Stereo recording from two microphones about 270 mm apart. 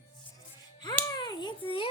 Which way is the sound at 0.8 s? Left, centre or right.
Centre.